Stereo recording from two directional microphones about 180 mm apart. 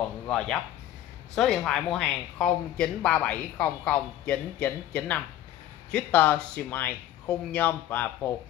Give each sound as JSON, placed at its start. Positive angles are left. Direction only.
{"t": 1.3, "sound": "speech", "side_deg": 0}